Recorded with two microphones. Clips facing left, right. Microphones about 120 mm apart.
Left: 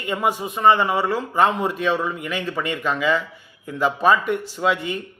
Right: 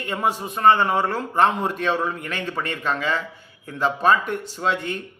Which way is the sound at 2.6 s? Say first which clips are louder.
Left 3 dB; 40° right (ahead or behind).